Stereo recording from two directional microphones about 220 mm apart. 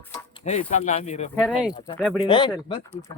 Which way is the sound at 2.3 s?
20° left (ahead or behind).